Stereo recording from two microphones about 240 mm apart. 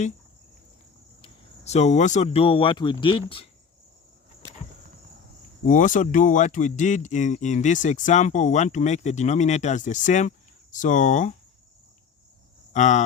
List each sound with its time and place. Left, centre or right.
1.2 s speech: left
5.6 s speech: left
12.7 s speech: left